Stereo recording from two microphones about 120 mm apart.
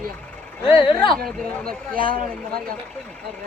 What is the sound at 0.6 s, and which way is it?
Speech, 45° left (ahead or behind).